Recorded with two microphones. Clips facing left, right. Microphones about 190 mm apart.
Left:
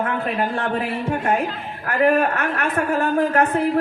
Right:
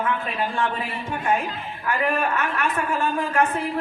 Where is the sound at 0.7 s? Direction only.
65° left (ahead or behind).